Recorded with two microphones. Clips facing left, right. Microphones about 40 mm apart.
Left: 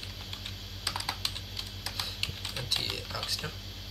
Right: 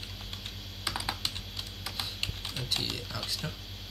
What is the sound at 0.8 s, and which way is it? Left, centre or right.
Computer keyboard, centre.